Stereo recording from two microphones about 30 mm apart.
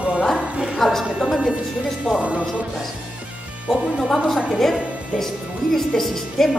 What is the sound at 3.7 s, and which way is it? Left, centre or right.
Speech, centre.